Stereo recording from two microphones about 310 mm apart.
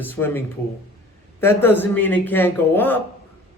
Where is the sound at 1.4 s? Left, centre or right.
Centre.